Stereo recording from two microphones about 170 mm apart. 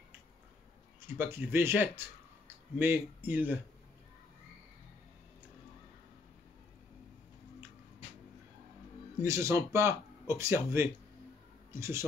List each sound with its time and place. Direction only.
1.0 s speech: 10° right (ahead or behind)
9.2 s speech: 15° right (ahead or behind)